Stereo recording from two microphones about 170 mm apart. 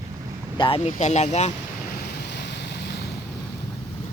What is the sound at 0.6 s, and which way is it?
Speech, 30° left (ahead or behind).